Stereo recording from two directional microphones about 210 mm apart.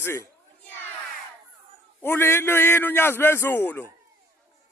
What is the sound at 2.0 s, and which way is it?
A man's voice, 10° left (ahead or behind).